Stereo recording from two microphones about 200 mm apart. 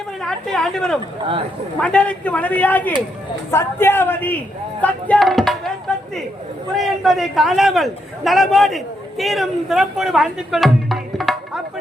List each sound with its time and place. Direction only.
0.2 s a man's voice: centre (ahead or behind)
1.2 s speech: 25° right (ahead or behind)
1.8 s a man's voice: 5° left (ahead or behind)
4.8 s music: 5° left (ahead or behind)
6.7 s a man's voice: centre (ahead or behind)